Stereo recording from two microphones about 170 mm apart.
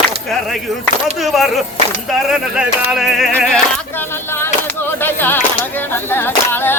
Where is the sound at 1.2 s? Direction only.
Centre (ahead or behind).